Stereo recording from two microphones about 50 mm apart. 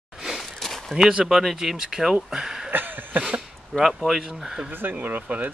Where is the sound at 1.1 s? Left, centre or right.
Centre.